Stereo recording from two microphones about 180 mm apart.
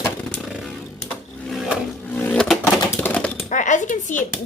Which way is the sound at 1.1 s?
Centre (ahead or behind).